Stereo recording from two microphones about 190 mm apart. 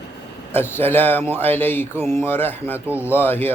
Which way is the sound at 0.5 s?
10° left (ahead or behind).